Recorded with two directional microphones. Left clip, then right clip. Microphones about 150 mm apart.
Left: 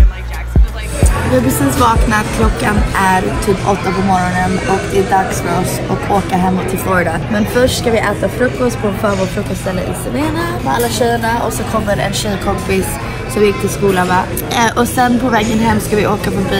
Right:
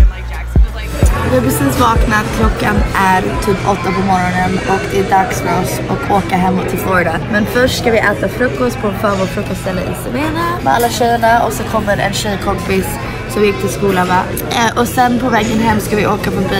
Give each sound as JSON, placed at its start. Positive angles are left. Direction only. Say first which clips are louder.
{"t": 1.3, "sound": "a woman's voice", "louder": "even", "side_deg": -10}
{"t": 6.9, "sound": "speech", "louder": "right 1 dB", "side_deg": -5}
{"t": 9.7, "sound": "speech", "louder": "left 1 dB", "side_deg": -15}
{"t": 10.7, "sound": "speech", "louder": "right 2 dB", "side_deg": -35}
{"t": 11.4, "sound": "a woman's voice", "louder": "right 1 dB", "side_deg": -5}